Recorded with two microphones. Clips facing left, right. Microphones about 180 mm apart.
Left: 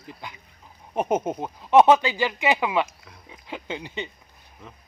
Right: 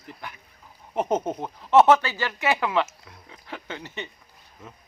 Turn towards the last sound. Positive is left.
turn(degrees=15)  # may be behind; listen again after turning